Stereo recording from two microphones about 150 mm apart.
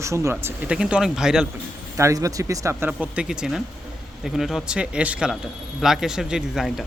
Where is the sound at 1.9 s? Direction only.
20° right (ahead or behind).